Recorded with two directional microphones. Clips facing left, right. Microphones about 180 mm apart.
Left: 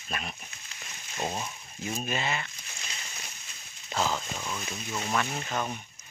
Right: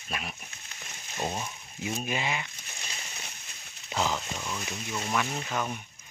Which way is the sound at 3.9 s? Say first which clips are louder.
Even; 15° right (ahead or behind).